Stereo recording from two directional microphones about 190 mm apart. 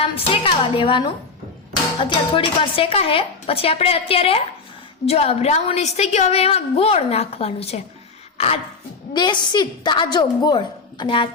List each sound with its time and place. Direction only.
0.0 s a woman's voice: 30° left (ahead or behind)